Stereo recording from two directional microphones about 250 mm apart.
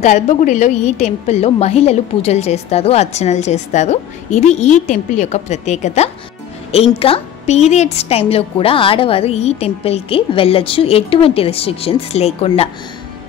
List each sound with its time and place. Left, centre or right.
0.0 s a woman's voice: left